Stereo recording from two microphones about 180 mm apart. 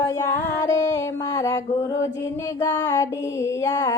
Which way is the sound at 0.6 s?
15° left (ahead or behind).